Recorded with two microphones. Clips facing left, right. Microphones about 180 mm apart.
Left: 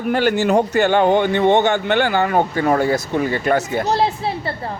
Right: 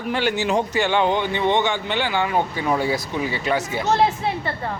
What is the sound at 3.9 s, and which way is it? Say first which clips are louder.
Speech: left 1 dB; 35° left (ahead or behind).